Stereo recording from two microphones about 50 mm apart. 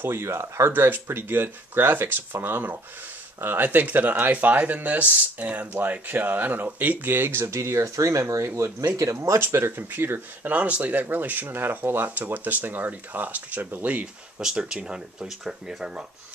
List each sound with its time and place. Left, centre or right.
0.0 s speech: right
7.1 s speech: right
9.5 s speech: right
10.5 s speech: right
12.2 s speech: right
14.4 s speech: centre